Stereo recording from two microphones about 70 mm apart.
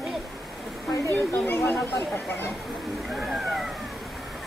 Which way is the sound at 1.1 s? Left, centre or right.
Left.